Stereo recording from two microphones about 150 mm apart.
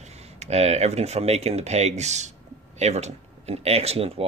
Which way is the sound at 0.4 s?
45° right (ahead or behind).